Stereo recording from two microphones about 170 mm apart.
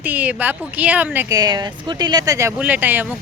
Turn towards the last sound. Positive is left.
turn(degrees=-10)  # may be behind; listen again after turning